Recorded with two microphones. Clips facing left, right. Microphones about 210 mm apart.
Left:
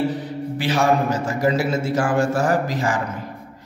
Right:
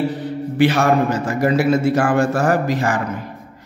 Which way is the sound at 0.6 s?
60° right (ahead or behind).